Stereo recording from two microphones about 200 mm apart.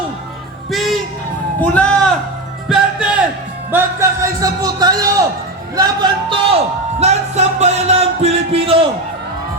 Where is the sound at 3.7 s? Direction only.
15° right (ahead or behind).